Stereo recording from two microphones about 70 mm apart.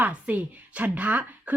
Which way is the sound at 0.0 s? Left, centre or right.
Right.